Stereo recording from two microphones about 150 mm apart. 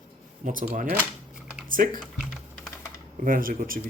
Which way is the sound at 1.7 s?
65° right (ahead or behind).